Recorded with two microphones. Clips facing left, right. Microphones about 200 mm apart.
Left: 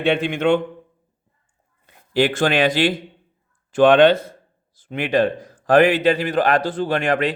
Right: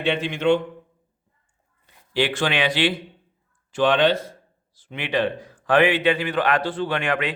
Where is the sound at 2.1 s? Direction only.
45° left (ahead or behind).